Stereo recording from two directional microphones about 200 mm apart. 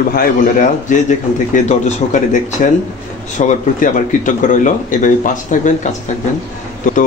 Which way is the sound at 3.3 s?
40° left (ahead or behind).